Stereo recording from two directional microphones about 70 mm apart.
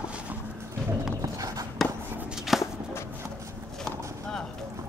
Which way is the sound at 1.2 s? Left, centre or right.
Right.